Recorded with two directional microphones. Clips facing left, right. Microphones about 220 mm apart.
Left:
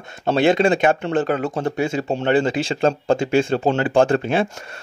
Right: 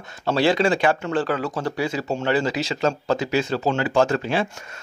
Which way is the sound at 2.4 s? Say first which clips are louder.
Left 3 dB; 50° left (ahead or behind).